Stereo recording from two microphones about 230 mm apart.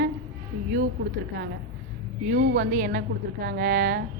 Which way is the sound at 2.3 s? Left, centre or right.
Right.